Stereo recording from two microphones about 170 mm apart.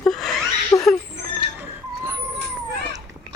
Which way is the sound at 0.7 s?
20° left (ahead or behind).